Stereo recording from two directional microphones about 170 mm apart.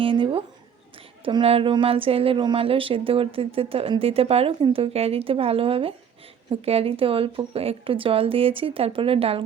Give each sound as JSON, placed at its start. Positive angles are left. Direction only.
{"t": 0.0, "sound": "a woman's voice", "side_deg": -30}